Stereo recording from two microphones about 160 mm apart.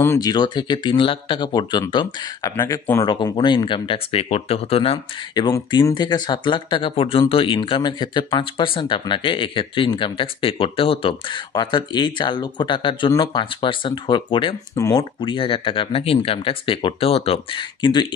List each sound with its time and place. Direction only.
0.0 s speech: 20° left (ahead or behind)
2.5 s speech: 15° left (ahead or behind)